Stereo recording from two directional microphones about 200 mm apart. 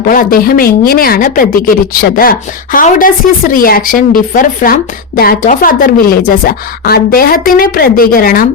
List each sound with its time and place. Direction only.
0.0 s speech: 45° left (ahead or behind)